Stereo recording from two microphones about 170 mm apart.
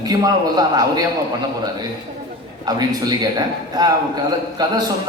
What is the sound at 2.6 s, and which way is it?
Speech, 20° right (ahead or behind).